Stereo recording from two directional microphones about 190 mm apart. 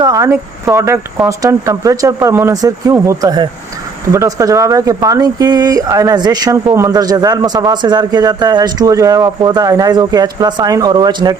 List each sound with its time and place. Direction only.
0.0 s speech: 15° right (ahead or behind)